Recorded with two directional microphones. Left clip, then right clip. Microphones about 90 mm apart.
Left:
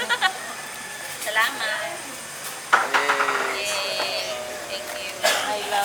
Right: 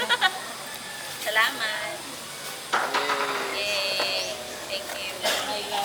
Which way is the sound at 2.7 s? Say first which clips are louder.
Left 5 dB; 40° left (ahead or behind).